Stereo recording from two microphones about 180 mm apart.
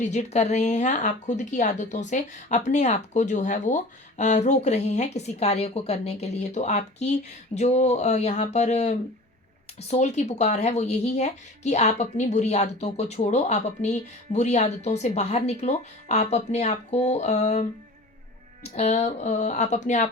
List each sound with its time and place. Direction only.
0.0 s a woman's voice: 40° left (ahead or behind)